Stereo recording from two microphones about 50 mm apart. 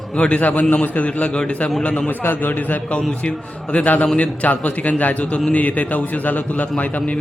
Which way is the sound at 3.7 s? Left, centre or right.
Left.